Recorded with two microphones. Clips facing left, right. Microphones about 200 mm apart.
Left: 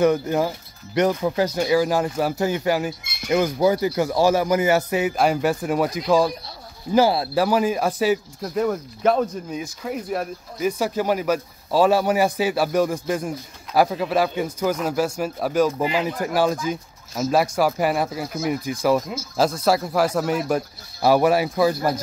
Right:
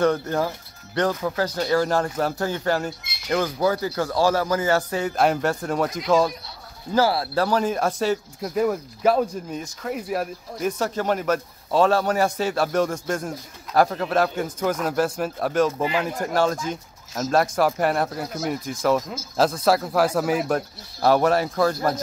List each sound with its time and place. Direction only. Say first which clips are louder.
0.0 s speech: left 2 dB; 10° left (ahead or behind)
3.0 s squawk: left 7 dB; 50° left (ahead or behind)
3.3 s speech: left 3 dB; 15° left (ahead or behind)
5.1 s speech: right 2 dB; centre (ahead or behind)
6.9 s speech: left 3 dB; 15° left (ahead or behind); by 15.7 s centre (ahead or behind)
15.8 s speech: left 1 dB; 15° left (ahead or behind)